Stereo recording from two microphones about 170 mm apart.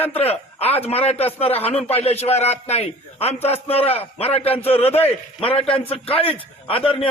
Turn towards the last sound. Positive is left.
turn(degrees=35)  # may be behind; listen again after turning